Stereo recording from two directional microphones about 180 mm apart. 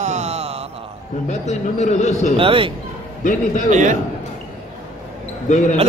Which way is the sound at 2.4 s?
30° right (ahead or behind).